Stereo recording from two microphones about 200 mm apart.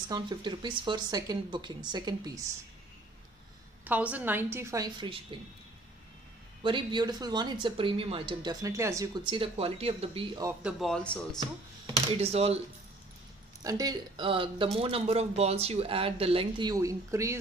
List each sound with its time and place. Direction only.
0.1 s speech: 20° right (ahead or behind)
3.8 s a woman's voice: 10° right (ahead or behind); by 5.4 s 25° right (ahead or behind)
6.6 s speech: 25° right (ahead or behind)
10.6 s speech: centre (ahead or behind)
11.8 s speech: 30° right (ahead or behind)
13.6 s speech: 20° right (ahead or behind)